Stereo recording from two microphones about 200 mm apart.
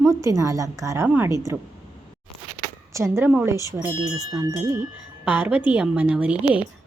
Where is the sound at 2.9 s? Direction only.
15° right (ahead or behind).